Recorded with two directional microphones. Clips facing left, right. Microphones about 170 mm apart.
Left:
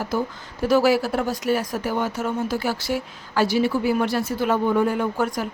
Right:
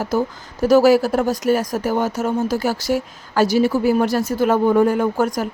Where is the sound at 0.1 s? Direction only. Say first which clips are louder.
Right 6 dB; 45° right (ahead or behind).